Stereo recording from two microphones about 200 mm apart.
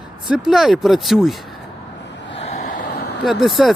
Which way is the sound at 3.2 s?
Centre (ahead or behind).